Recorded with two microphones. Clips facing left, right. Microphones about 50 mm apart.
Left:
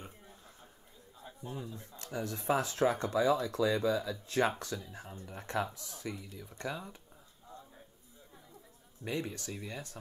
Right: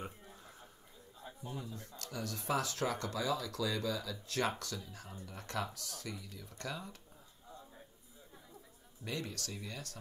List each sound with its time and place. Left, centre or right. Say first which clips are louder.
1.2 s speech: left 2 dB; centre
9.0 s speech: left 4 dB; left